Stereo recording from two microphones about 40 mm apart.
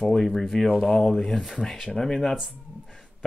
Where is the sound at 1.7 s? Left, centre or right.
Centre.